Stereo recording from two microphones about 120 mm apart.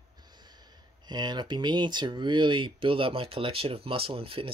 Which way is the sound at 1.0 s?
35° right (ahead or behind).